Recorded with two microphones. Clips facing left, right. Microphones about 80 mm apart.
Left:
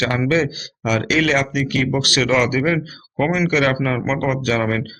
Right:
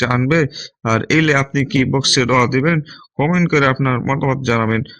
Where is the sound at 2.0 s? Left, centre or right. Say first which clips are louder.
Right 3 dB; right.